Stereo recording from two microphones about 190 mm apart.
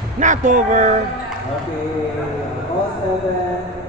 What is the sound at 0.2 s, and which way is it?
Speech, 40° right (ahead or behind).